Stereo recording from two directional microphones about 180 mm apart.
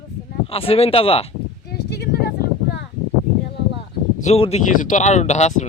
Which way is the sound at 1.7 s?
65° left (ahead or behind).